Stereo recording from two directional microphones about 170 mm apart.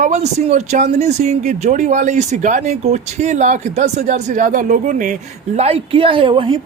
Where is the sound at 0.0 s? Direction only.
40° right (ahead or behind).